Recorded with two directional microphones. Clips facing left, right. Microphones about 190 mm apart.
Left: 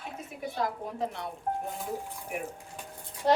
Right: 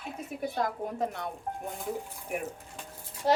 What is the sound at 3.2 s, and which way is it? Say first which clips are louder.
Speech: left 1 dB; 5° right (ahead or behind).